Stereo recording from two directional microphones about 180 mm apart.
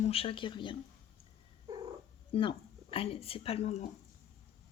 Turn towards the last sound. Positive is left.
turn(degrees=40)  # may be behind; listen again after turning